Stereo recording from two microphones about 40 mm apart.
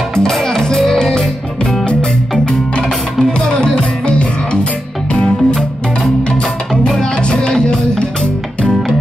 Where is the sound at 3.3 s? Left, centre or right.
Centre.